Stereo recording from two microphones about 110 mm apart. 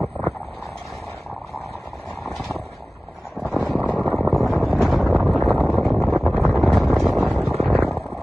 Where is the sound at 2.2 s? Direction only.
Centre (ahead or behind).